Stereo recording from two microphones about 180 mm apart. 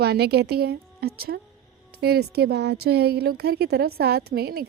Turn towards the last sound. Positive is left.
turn(degrees=-60)  # may be behind; listen again after turning